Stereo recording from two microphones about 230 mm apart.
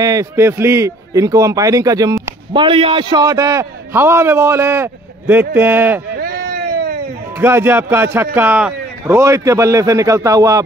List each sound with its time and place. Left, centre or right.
0.0 s a man's voice: centre
6.1 s a sound: right
7.3 s a man's voice: centre